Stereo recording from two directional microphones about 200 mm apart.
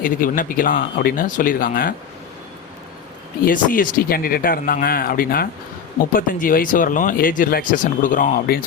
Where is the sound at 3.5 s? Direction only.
45° left (ahead or behind).